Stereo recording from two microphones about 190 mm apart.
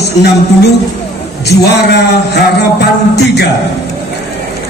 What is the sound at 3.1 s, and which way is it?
Speech, 60° left (ahead or behind).